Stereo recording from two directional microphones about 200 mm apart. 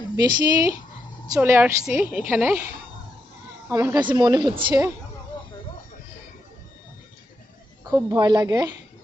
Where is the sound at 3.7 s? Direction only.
15° right (ahead or behind).